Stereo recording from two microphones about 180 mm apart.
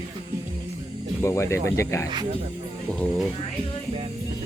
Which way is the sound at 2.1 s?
25° right (ahead or behind).